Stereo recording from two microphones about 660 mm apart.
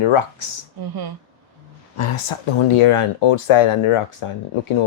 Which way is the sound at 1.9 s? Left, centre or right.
Left.